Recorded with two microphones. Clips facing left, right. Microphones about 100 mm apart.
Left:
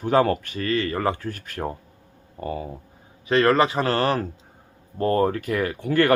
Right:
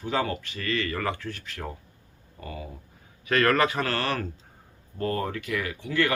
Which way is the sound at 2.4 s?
35° left (ahead or behind).